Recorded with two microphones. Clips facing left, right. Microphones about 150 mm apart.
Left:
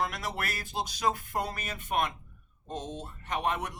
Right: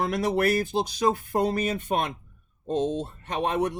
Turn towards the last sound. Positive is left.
turn(degrees=-30)  # may be behind; listen again after turning